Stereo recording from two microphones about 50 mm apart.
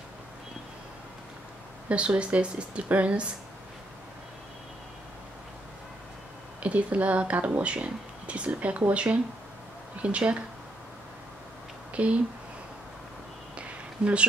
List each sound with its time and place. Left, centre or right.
1.9 s speech: right
6.6 s speech: right
11.9 s speech: right
13.6 s a sound: right